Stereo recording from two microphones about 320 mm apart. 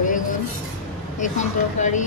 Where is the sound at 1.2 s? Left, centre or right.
Left.